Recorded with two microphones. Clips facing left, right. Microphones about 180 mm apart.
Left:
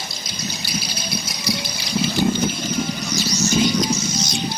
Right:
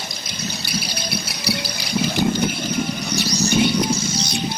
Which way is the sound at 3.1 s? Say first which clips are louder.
Right 1 dB; 60° right (ahead or behind).